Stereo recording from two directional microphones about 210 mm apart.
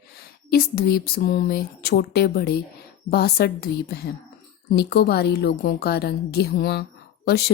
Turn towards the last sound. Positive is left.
turn(degrees=50)  # may be behind; listen again after turning